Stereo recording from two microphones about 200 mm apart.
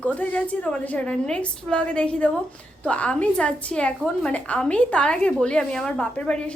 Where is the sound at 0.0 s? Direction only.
5° left (ahead or behind).